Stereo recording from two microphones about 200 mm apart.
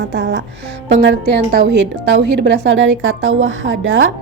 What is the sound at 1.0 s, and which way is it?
A woman's voice, 55° right (ahead or behind).